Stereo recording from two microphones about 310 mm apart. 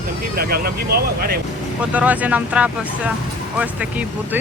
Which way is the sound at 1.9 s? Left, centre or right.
Centre.